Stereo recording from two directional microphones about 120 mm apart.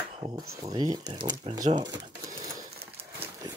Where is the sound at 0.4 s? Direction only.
30° right (ahead or behind).